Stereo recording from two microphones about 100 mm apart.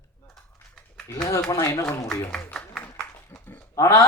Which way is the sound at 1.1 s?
30° left (ahead or behind).